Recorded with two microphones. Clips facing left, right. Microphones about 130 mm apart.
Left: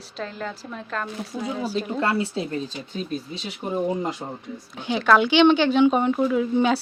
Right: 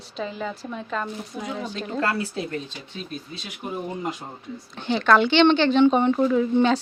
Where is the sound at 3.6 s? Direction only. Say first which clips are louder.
Left 4 dB; 25° left (ahead or behind).